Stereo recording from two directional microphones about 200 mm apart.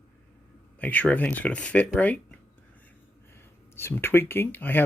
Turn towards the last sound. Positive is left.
turn(degrees=10)  # may be behind; listen again after turning